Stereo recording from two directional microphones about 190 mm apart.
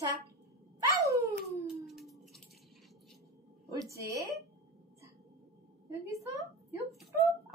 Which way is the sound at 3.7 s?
15° right (ahead or behind).